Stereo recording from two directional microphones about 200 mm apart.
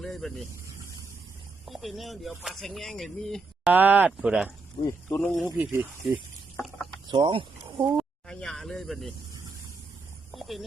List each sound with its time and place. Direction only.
0.0 s speech: centre (ahead or behind)
1.6 s speech: centre (ahead or behind)
4.8 s speech: 15° left (ahead or behind)
5.5 s speech: 10° right (ahead or behind)
6.6 s mechanisms: centre (ahead or behind)
7.1 s speech: 25° right (ahead or behind)
7.9 s speech: 5° left (ahead or behind)
10.3 s a sound: centre (ahead or behind)